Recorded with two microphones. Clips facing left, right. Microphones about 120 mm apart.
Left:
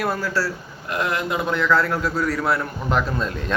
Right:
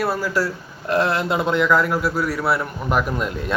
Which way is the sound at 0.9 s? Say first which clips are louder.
Right 4 dB; 30° right (ahead or behind).